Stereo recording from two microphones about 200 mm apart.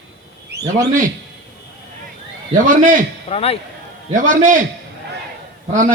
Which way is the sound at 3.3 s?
30° left (ahead or behind).